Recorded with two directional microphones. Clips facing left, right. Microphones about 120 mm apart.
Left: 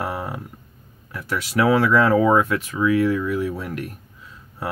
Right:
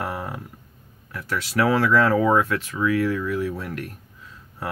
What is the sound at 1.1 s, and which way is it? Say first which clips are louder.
Speech: left 2 dB; 15° left (ahead or behind).